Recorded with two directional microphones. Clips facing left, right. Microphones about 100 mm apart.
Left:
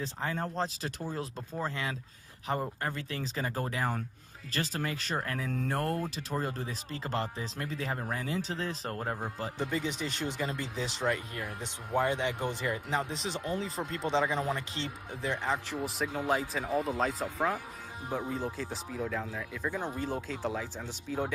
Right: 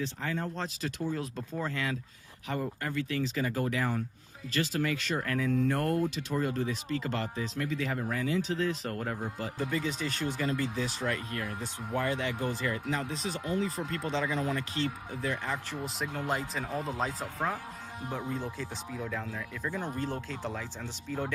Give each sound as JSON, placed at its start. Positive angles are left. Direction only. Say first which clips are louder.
{"t": 0.0, "sound": "a man's voice", "louder": "even", "side_deg": 35}
{"t": 15.8, "sound": "speech", "louder": "left 2 dB", "side_deg": 0}